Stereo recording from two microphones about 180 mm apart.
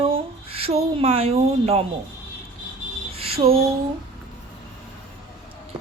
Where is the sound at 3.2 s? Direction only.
35° right (ahead or behind).